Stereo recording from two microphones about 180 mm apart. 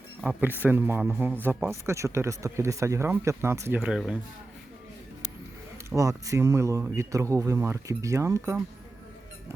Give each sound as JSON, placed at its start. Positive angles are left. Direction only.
{"t": 0.2, "sound": "speech", "side_deg": -10}
{"t": 3.8, "sound": "speech", "side_deg": 0}
{"t": 5.7, "sound": "speech", "side_deg": -15}